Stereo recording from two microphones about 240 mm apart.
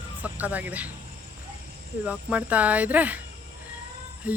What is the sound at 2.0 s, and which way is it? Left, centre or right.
Speech, centre.